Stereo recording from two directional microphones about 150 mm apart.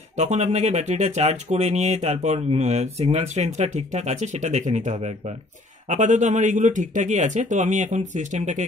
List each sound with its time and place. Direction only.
0.1 s speech: 50° right (ahead or behind)